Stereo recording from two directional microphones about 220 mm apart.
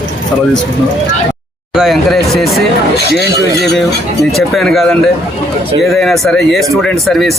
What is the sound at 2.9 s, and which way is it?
Speech, 50° left (ahead or behind).